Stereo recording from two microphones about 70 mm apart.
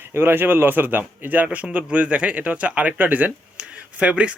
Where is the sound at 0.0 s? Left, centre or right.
Right.